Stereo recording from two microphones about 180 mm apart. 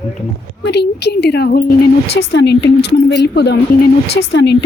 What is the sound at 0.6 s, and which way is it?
Speech, 70° left (ahead or behind).